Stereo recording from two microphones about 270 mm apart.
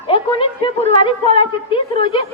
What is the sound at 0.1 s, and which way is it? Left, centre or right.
A woman's voice, centre.